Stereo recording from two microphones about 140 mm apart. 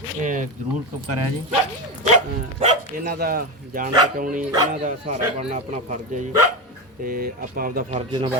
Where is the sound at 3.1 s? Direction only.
90° right.